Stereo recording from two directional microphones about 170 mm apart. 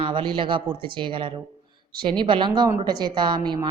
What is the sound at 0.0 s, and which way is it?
Speech, 30° right (ahead or behind).